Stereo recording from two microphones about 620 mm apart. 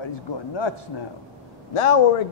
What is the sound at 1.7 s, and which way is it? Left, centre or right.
Speech, left.